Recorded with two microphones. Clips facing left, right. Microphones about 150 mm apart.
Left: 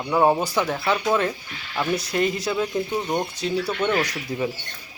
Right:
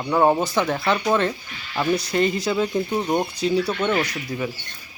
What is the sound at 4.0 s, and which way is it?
Speech, 20° left (ahead or behind).